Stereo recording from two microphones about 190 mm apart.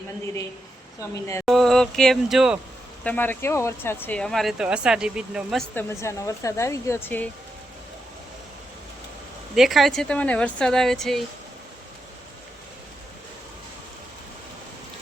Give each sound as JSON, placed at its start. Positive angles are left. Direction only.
{"t": 1.1, "sound": "speech", "side_deg": 15}
{"t": 1.5, "sound": "speech", "side_deg": 0}
{"t": 3.0, "sound": "speech", "side_deg": 10}
{"t": 5.7, "sound": "speech", "side_deg": 15}
{"t": 9.6, "sound": "speech", "side_deg": 0}